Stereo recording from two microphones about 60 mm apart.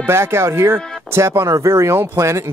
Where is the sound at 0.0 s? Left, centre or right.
Right.